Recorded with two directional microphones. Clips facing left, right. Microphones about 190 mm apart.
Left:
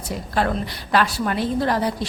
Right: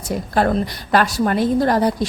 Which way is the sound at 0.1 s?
45° right (ahead or behind).